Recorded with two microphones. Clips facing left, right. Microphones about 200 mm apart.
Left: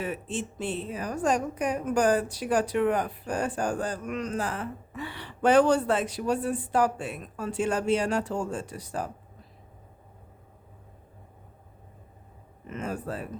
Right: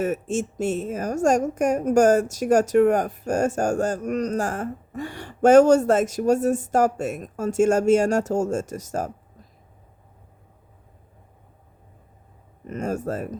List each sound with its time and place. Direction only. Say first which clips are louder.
0.0 s a woman's voice: right 8 dB; 45° right (ahead or behind)
12.6 s a woman's voice: right 6 dB; 45° right (ahead or behind)